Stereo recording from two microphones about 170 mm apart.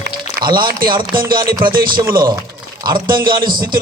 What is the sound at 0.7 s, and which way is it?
Speech, 55° right (ahead or behind).